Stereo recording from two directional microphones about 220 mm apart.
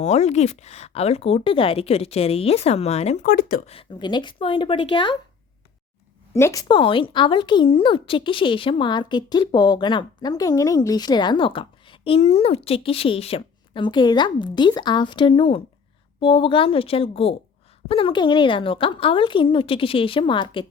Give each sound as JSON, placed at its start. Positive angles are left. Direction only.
{"t": 0.0, "sound": "a woman's voice", "side_deg": 30}
{"t": 3.7, "sound": "a woman's voice", "side_deg": 25}
{"t": 6.3, "sound": "a woman's voice", "side_deg": 15}